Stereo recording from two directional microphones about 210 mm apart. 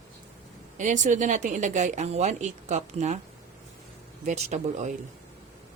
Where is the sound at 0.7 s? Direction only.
35° right (ahead or behind).